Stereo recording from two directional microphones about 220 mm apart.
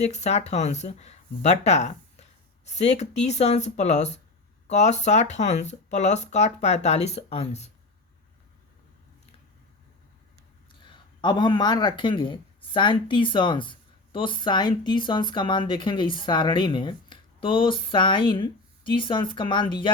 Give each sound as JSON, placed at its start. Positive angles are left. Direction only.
{"t": 0.0, "sound": "speech", "side_deg": 30}
{"t": 10.7, "sound": "speech", "side_deg": 20}